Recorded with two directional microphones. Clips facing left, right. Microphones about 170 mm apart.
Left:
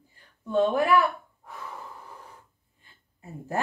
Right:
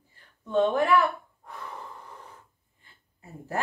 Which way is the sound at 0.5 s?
10° left (ahead or behind).